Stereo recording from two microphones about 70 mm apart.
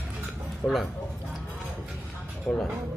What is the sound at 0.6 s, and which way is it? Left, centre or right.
Speech, centre.